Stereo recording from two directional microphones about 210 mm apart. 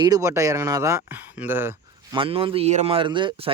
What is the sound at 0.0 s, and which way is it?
Speech, 15° right (ahead or behind).